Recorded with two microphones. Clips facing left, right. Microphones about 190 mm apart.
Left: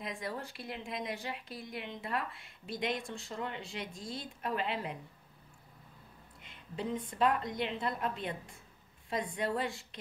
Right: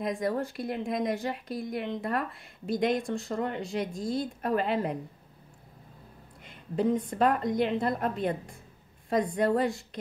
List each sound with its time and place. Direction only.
0.0 s speech: 45° right (ahead or behind)
6.4 s speech: 45° right (ahead or behind)